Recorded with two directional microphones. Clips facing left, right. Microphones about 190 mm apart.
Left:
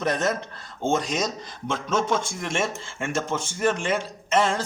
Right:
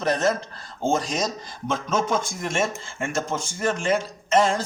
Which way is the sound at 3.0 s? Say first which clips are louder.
Even; 35° right (ahead or behind).